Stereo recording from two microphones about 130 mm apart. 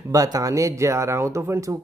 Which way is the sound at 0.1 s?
25° right (ahead or behind).